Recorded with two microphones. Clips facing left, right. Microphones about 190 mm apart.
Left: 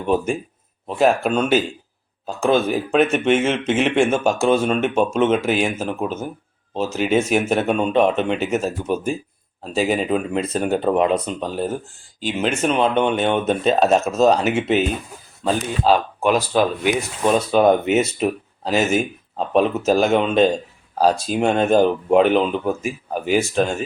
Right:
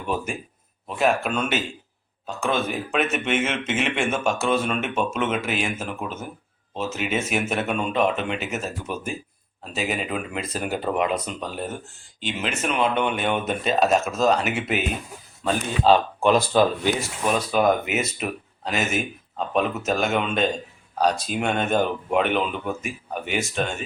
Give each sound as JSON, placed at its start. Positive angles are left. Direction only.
{"t": 0.0, "sound": "speech", "side_deg": 30}
{"t": 15.8, "sound": "speech", "side_deg": 5}
{"t": 17.2, "sound": "speech", "side_deg": 30}